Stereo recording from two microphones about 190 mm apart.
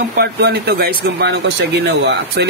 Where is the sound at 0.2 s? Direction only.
55° right (ahead or behind).